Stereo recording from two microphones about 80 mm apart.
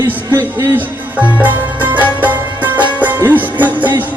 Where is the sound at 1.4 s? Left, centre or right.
Right.